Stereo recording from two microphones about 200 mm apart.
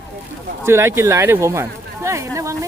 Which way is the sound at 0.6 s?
15° right (ahead or behind).